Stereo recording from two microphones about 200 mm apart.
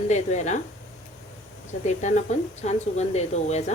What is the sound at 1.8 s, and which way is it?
Speech, 35° left (ahead or behind).